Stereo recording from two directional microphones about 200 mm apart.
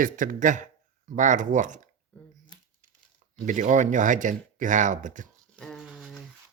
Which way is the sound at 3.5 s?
40° right (ahead or behind).